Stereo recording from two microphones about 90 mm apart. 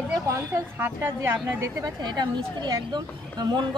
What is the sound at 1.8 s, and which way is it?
A woman's voice, 50° right (ahead or behind).